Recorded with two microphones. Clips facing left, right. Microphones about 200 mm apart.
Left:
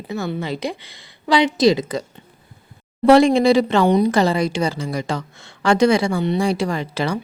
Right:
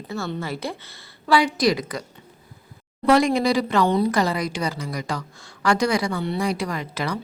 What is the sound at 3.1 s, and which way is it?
A woman's voice, 25° left (ahead or behind).